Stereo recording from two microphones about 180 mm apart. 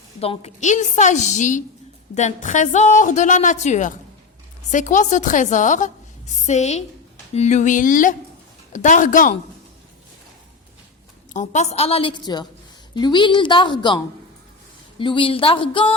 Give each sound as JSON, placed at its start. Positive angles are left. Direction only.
{"t": 0.2, "sound": "a woman's voice", "side_deg": 35}
{"t": 11.3, "sound": "a woman's voice", "side_deg": 40}